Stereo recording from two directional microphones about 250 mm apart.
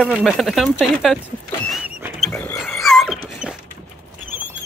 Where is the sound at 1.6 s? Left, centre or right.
Centre.